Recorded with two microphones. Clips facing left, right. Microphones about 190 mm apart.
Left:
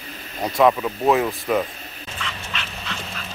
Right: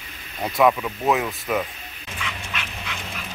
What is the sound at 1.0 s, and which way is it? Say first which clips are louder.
Speech: left 3 dB; 35° left (ahead or behind).